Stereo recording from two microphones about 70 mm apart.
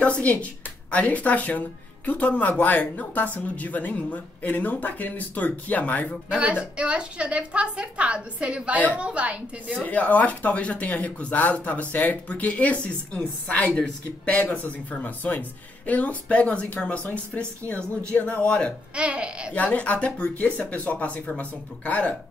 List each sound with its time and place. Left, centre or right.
0.0 s speech: centre
6.3 s a woman's voice: centre
9.8 s speech: left
18.9 s a woman's voice: centre
19.5 s speech: centre